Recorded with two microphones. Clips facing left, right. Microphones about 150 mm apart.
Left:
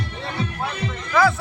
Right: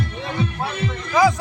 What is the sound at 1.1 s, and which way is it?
Music, 15° right (ahead or behind).